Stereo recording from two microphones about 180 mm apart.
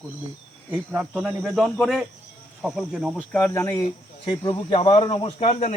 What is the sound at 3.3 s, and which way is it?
Speech, 10° left (ahead or behind).